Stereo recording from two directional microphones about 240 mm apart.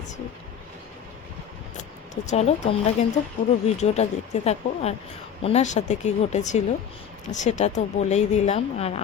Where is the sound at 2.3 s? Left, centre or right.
Left.